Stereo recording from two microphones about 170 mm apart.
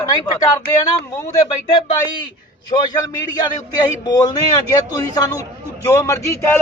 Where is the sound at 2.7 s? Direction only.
30° left (ahead or behind); by 6.6 s 15° left (ahead or behind).